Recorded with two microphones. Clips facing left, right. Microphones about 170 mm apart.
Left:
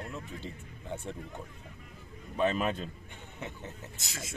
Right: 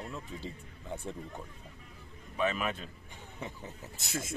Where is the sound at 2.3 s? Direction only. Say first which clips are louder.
Left 3 dB; 35° left (ahead or behind).